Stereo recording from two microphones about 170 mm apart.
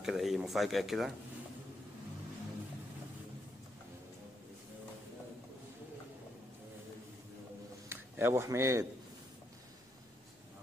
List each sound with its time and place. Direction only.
0.0 s speech: centre (ahead or behind)
7.9 s a man's voice: 15° right (ahead or behind)